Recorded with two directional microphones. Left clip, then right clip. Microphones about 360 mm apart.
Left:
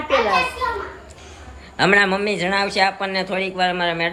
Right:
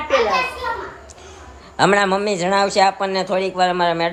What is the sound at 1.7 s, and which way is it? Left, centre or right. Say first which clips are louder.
A man's voice: right 1 dB; centre.